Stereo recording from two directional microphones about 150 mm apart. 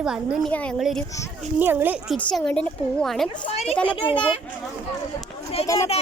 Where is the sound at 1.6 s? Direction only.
15° right (ahead or behind).